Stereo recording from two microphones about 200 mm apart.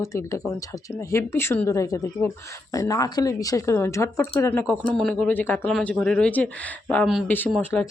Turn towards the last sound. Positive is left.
turn(degrees=5)  # may be behind; listen again after turning